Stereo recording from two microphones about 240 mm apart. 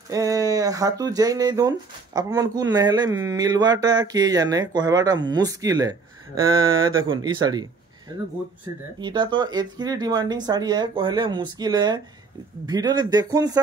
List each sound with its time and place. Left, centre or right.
0.1 s speech: centre
9.0 s speech: centre